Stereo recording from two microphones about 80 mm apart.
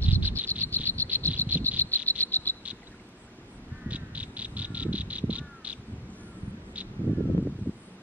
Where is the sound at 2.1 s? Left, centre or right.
Left.